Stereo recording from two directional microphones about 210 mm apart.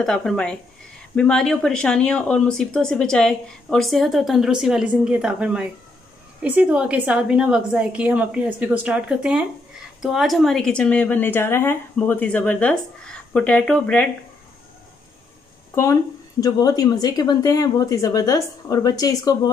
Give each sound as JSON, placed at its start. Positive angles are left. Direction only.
{"t": 0.0, "sound": "speech", "side_deg": 5}
{"t": 15.7, "sound": "speech", "side_deg": 15}